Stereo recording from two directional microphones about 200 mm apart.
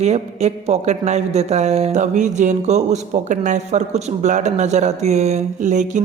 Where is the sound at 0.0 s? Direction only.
35° right (ahead or behind).